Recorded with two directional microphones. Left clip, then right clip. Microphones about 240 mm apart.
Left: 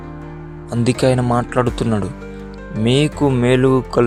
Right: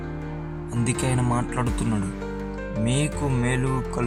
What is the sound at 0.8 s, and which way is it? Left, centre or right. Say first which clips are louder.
Speech: left 11 dB; left.